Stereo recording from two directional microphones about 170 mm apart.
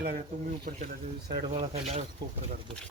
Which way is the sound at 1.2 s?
50° right (ahead or behind).